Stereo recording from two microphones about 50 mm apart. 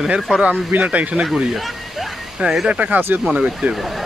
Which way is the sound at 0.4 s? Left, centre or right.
Right.